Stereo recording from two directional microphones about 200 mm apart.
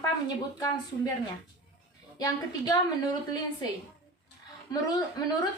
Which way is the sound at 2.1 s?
20° left (ahead or behind).